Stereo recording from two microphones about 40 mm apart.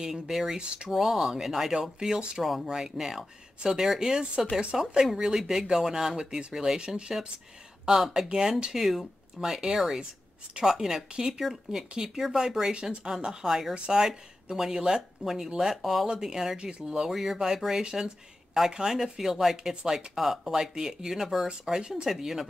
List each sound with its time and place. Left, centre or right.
0.0 s speech: centre
2.4 s speech: centre
8.7 s speech: centre
13.7 s speech: right; by 16.1 s centre
16.1 s speech: centre